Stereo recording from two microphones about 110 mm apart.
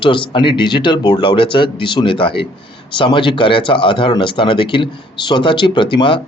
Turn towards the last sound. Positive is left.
turn(degrees=50)  # may be behind; listen again after turning